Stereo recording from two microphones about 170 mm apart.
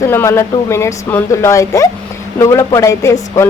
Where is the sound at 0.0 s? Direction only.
15° left (ahead or behind).